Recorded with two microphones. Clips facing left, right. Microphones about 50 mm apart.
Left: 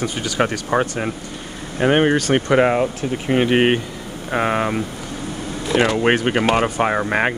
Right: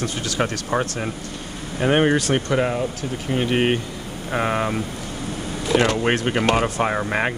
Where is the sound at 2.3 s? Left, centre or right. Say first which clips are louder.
Left 5 dB; left.